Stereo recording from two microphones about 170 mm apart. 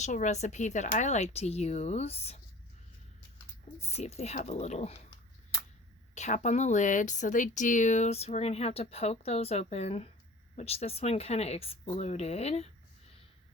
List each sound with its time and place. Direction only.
0.0 s speech: 45° left (ahead or behind)
3.8 s speech: 40° left (ahead or behind)
6.1 s speech: 45° left (ahead or behind)